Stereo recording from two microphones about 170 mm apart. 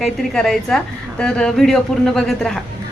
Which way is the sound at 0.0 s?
Centre (ahead or behind).